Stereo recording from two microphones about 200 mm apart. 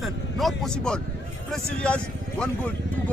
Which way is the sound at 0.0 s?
Centre (ahead or behind).